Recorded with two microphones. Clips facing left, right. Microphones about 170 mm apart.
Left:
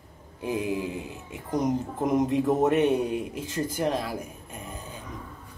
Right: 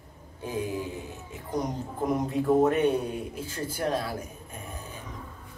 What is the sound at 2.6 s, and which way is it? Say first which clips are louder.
A man's voice: left 2 dB; 10° left (ahead or behind).